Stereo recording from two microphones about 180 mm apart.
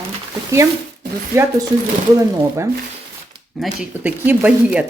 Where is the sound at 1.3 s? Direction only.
15° right (ahead or behind).